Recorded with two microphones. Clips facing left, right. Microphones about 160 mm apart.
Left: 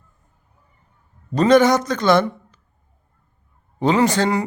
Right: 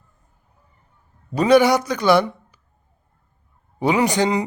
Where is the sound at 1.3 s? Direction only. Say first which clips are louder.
Left 1 dB; 10° right (ahead or behind).